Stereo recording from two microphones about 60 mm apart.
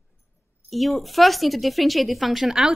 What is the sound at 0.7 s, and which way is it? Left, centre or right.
A woman's voice, centre.